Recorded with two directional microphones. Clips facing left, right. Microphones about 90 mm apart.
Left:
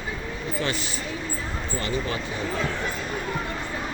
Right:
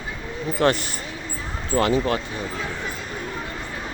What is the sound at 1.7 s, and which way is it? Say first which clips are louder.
Speech: right 9 dB; 85° right.